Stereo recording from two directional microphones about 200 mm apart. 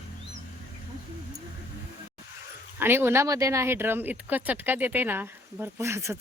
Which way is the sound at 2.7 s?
10° right (ahead or behind).